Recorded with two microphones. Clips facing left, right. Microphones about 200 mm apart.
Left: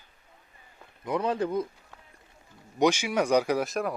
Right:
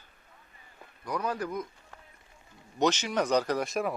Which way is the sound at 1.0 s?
25° left (ahead or behind).